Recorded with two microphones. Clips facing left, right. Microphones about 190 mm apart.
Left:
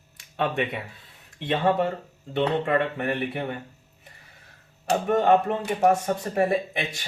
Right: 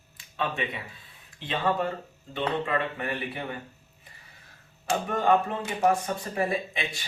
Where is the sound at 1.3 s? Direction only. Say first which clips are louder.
Left 5 dB; 60° left (ahead or behind).